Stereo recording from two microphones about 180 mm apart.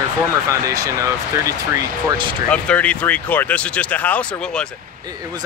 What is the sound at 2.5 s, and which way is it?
Speech, 5° left (ahead or behind).